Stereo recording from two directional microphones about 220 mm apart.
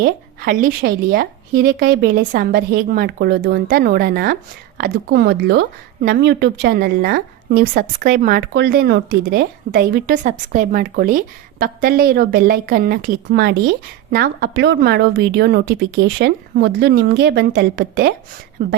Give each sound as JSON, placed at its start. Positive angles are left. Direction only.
{"t": 0.0, "sound": "a woman's voice", "side_deg": -40}